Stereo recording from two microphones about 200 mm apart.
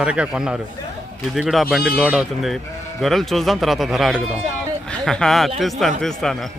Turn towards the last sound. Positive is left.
turn(degrees=0)  # may be behind; listen again after turning